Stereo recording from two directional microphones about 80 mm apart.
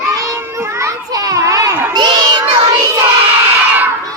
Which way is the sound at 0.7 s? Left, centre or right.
Right.